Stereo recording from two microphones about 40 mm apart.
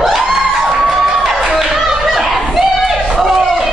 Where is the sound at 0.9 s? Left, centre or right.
Centre.